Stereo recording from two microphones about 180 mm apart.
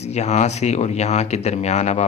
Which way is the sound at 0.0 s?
40° left (ahead or behind).